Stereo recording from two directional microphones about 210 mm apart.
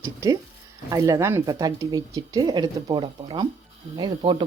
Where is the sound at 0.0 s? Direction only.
15° right (ahead or behind).